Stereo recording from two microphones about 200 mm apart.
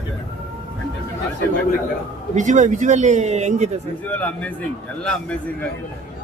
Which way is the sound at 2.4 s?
40° right (ahead or behind).